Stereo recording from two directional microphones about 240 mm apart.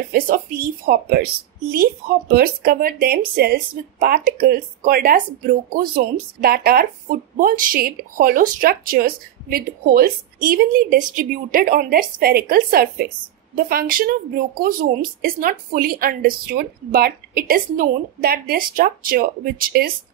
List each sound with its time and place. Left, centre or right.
0.1 s a woman's voice: right